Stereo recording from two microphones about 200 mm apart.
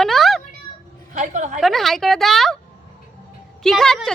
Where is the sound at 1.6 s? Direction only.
Centre (ahead or behind).